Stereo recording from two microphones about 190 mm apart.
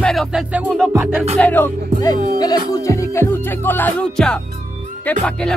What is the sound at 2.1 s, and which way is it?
Speech, 45° right (ahead or behind).